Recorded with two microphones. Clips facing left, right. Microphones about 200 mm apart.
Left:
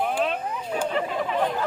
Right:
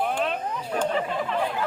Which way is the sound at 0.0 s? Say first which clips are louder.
Left 1 dB; 5° left (ahead or behind).